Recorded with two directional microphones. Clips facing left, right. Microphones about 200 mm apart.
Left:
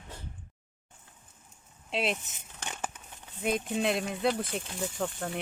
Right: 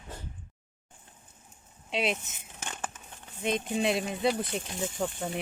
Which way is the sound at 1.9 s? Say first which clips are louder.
Right 1 dB; centre (ahead or behind).